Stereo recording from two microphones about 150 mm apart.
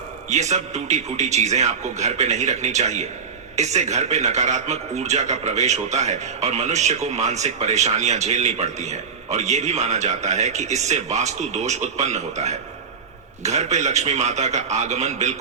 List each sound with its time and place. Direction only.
0.3 s a man's voice: 50° right (ahead or behind)